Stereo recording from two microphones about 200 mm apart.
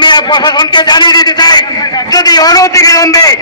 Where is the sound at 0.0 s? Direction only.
20° left (ahead or behind).